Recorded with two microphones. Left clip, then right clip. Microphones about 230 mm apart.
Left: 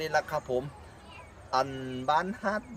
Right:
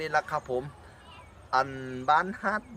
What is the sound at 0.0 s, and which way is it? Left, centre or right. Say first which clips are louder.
Speech: right 1 dB; centre.